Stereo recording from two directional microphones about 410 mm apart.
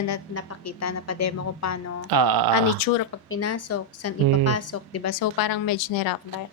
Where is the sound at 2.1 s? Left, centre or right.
Right.